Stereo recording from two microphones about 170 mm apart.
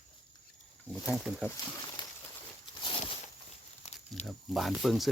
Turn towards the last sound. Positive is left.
turn(degrees=0)  # may be behind; listen again after turning